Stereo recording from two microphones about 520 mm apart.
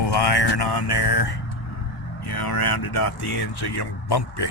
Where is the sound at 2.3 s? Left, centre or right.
Left.